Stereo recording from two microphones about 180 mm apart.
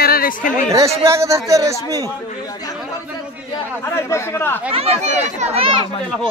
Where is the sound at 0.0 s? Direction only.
55° left (ahead or behind).